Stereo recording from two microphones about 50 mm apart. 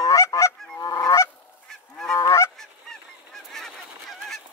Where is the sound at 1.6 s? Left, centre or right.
Centre.